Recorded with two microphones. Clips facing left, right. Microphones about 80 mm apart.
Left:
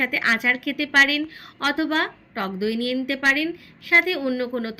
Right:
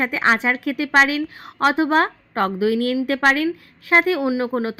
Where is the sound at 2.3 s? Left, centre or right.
Right.